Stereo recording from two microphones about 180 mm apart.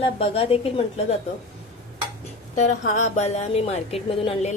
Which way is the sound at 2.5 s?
40° left (ahead or behind).